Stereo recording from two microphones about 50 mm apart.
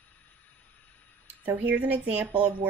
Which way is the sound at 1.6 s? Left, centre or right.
Right.